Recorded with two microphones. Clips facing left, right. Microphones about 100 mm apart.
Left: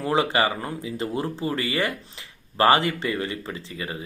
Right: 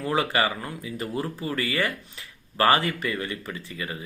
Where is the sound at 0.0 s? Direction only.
25° left (ahead or behind).